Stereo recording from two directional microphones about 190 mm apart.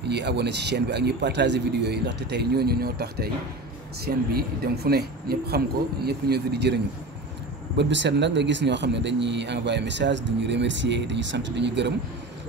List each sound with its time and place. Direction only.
0.1 s a man's voice: 60° right (ahead or behind)